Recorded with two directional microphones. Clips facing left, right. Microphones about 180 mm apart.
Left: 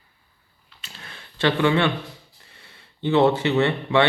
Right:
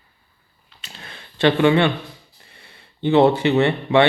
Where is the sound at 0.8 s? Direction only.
20° right (ahead or behind).